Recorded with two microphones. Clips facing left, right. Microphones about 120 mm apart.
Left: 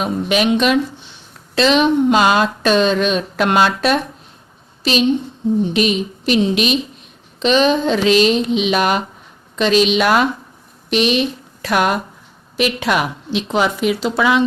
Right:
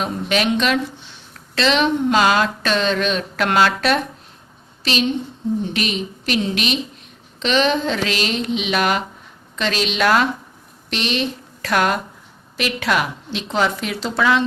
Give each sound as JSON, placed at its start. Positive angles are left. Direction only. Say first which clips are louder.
{"t": 0.0, "sound": "a woman's voice", "louder": "left 3 dB", "side_deg": 15}